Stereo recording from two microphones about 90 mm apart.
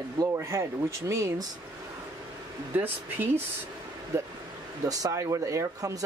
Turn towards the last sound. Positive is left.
turn(degrees=-35)  # may be behind; listen again after turning